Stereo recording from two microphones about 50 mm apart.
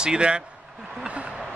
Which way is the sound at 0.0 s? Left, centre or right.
Centre.